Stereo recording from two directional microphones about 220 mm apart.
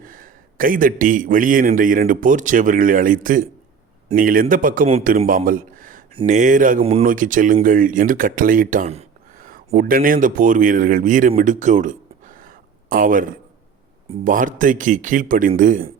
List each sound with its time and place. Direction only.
0.0 s speech: 40° right (ahead or behind)